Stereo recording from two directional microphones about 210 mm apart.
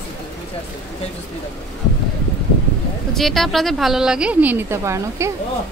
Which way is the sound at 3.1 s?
Centre (ahead or behind).